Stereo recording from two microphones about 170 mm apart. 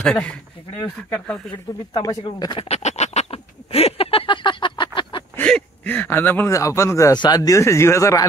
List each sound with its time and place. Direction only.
0.0 s speech: 5° left (ahead or behind)
2.0 s speech: 25° left (ahead or behind)
2.7 s duck: 40° left (ahead or behind)
5.3 s speech: 10° left (ahead or behind)